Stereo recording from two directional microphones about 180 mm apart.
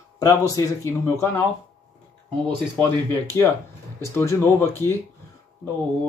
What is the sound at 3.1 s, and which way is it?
Speech, 10° left (ahead or behind).